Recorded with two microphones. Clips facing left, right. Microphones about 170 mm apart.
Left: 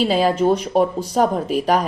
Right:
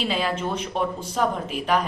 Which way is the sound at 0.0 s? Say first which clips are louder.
Left 9 dB; 40° left (ahead or behind).